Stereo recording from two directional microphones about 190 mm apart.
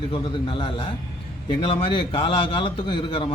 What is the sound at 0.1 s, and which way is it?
A man's voice, 25° left (ahead or behind).